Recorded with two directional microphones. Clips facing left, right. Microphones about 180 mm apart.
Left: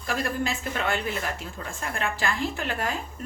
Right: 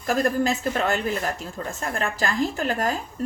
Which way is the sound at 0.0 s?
40° right (ahead or behind).